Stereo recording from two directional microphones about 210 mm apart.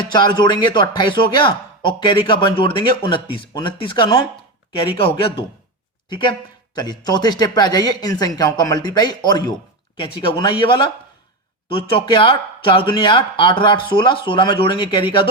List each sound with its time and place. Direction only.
0.1 s speech: 20° left (ahead or behind)